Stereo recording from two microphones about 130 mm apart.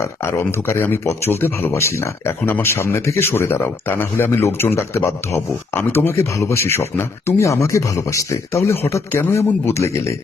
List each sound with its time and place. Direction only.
0.0 s speech: 20° left (ahead or behind)